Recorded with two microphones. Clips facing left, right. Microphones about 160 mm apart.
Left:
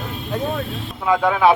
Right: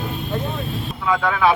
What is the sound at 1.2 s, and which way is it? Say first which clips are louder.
Speech: left 3 dB; 20° left (ahead or behind).